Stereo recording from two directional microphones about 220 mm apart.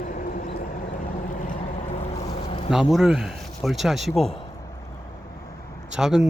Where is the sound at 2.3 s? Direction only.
25° left (ahead or behind).